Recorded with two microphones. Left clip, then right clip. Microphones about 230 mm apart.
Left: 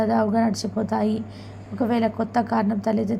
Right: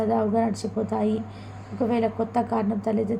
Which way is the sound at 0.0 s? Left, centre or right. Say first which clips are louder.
Left 2 dB; centre.